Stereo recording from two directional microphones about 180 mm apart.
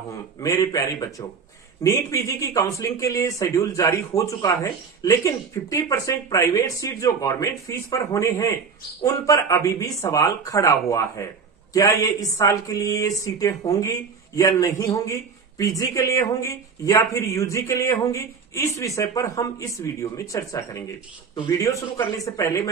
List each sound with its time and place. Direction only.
0.4 s speech: 20° left (ahead or behind)